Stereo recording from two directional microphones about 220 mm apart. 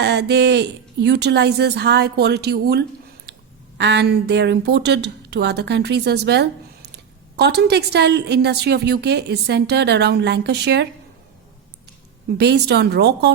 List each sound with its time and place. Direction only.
0.0 s a woman's voice: 50° right (ahead or behind)
12.4 s a woman's voice: 50° right (ahead or behind)